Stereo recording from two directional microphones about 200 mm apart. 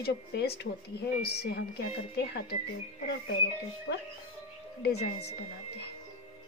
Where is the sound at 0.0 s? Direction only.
55° left (ahead or behind).